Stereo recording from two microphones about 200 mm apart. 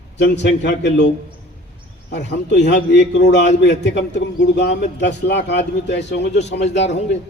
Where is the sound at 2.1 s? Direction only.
60° left (ahead or behind).